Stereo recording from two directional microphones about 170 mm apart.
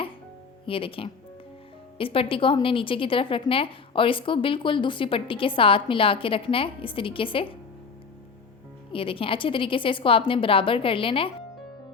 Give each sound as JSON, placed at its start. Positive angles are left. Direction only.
{"t": 0.6, "sound": "a woman's voice", "side_deg": 30}
{"t": 8.9, "sound": "a woman's voice", "side_deg": 30}